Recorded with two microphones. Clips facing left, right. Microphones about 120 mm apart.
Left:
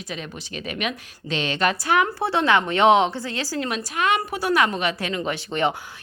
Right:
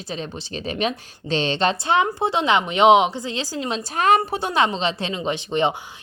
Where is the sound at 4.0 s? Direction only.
35° right (ahead or behind).